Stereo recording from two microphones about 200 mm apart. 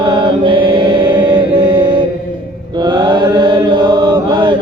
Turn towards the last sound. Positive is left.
turn(degrees=-20)  # may be behind; listen again after turning